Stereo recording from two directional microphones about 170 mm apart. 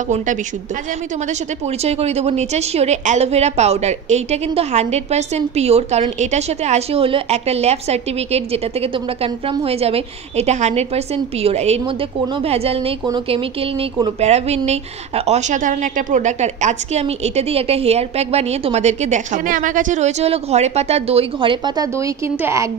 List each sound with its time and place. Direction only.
1.9 s a woman's voice: 40° right (ahead or behind); by 22.7 s 15° right (ahead or behind)